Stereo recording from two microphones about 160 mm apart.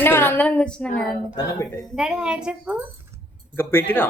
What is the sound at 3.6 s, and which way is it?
Speech, 15° left (ahead or behind).